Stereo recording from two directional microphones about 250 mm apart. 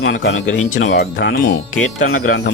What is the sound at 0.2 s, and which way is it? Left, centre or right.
Speech, left.